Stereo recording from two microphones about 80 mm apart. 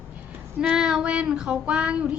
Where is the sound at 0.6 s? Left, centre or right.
Centre.